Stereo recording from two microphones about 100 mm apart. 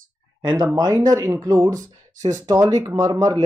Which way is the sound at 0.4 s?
40° right (ahead or behind).